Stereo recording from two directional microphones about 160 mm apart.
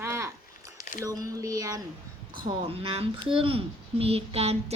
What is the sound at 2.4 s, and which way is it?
A child's voice, 35° right (ahead or behind).